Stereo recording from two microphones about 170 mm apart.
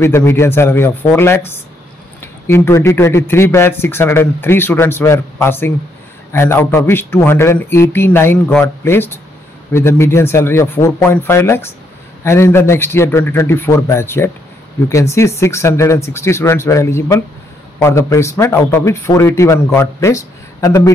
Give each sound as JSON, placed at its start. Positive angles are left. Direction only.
{"t": 0.0, "sound": "speech", "side_deg": 15}